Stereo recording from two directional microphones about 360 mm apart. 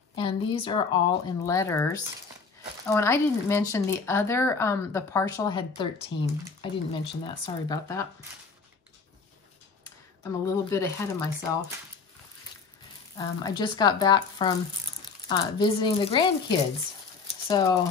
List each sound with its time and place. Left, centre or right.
0.1 s speech: centre
10.4 s speech: centre
13.2 s speech: centre